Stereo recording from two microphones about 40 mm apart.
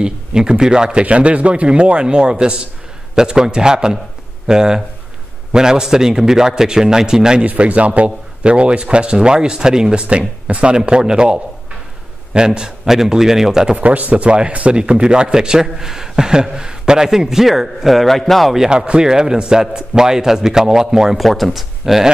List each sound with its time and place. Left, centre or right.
0.0 s a man's voice: centre
1.0 s a man's voice: right
7.4 s a man's voice: right; by 10.0 s centre
10.0 s a man's voice: right; by 13.7 s centre
13.7 s a man's voice: right; by 18.5 s centre
18.7 s a man's voice: right
21.2 s speech: centre